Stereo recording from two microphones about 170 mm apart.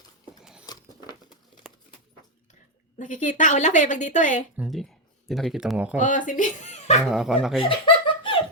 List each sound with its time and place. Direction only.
0.7 s patter: 25° left (ahead or behind)
1.6 s a sound: centre (ahead or behind)
3.0 s a woman's voice: 50° left (ahead or behind)
4.5 s speech: 5° right (ahead or behind)
6.0 s a woman's voice: 50° left (ahead or behind)
7.1 s speech: 5° right (ahead or behind)
7.6 s laughter: 30° left (ahead or behind)